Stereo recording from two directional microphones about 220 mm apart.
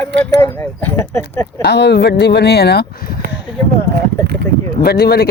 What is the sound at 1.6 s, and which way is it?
Speech, 50° left (ahead or behind).